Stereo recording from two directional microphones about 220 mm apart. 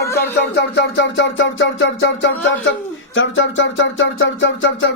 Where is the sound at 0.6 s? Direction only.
50° left (ahead or behind).